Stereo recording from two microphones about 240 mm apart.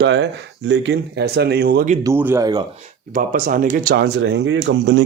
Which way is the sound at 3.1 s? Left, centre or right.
Right.